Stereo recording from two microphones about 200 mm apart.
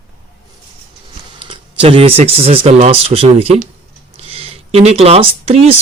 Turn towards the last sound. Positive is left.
turn(degrees=-30)  # may be behind; listen again after turning